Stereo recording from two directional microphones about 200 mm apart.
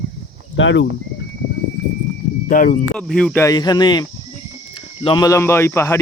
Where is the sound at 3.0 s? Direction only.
5° left (ahead or behind).